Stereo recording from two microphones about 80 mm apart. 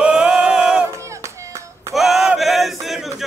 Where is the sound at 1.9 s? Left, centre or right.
Centre.